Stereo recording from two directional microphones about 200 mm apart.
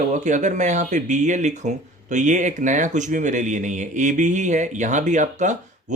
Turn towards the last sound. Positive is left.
turn(degrees=-35)  # may be behind; listen again after turning